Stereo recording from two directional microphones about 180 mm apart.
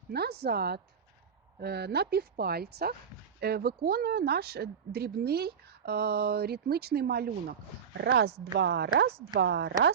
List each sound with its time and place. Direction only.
0.1 s a woman's voice: 65° right (ahead or behind)